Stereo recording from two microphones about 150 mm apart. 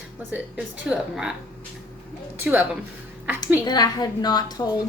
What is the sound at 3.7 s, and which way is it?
Speech, 25° left (ahead or behind).